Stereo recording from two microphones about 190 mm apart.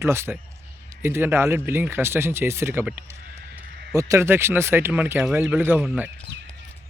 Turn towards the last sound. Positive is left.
turn(degrees=-10)  # may be behind; listen again after turning